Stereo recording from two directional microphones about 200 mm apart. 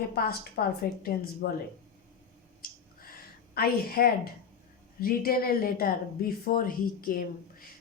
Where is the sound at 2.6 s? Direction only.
50° left (ahead or behind).